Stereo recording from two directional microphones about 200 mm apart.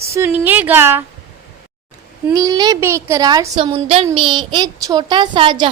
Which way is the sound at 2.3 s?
20° right (ahead or behind).